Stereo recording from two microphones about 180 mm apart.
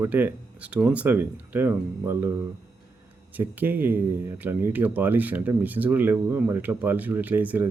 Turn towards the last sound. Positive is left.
turn(degrees=-10)  # may be behind; listen again after turning